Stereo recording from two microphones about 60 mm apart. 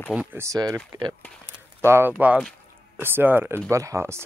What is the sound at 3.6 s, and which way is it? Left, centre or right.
Speech, right.